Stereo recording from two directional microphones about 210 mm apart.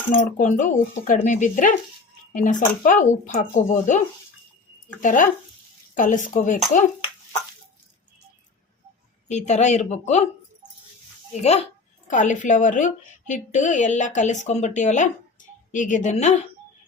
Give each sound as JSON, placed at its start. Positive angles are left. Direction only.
{"t": 0.1, "sound": "speech", "side_deg": 35}
{"t": 5.0, "sound": "speech", "side_deg": 35}
{"t": 9.3, "sound": "speech", "side_deg": 35}
{"t": 12.0, "sound": "speech", "side_deg": 35}